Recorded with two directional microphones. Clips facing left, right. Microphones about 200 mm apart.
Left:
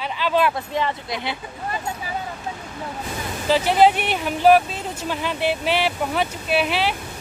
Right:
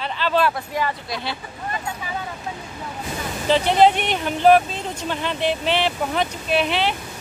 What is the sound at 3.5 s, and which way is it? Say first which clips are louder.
Speech: even; 5° left (ahead or behind).